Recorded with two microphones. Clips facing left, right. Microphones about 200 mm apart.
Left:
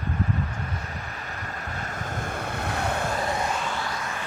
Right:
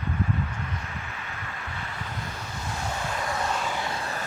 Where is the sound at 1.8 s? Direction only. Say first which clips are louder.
Left 5 dB; 50° left (ahead or behind).